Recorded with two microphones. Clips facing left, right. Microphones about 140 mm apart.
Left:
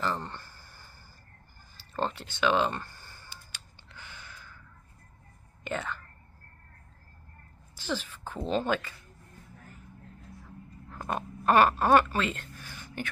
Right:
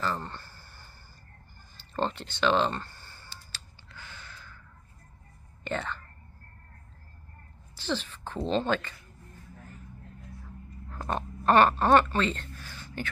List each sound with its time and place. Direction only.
0.0 s a sound: 15° left (ahead or behind)
2.0 s speech: 5° left (ahead or behind)
2.4 s a sound: 10° left (ahead or behind)
5.6 s speech: 10° left (ahead or behind)
7.8 s speech: 10° left (ahead or behind)
10.9 s speech: 5° left (ahead or behind)